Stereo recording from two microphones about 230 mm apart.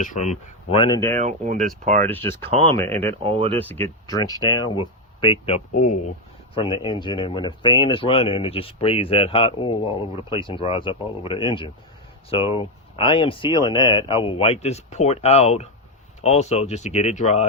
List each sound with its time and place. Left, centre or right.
0.0 s speech: left; by 1.1 s centre
1.1 s speech: right
2.0 s speech: centre
3.2 s speech: right
3.6 s speech: centre; by 6.0 s left
6.5 s speech: left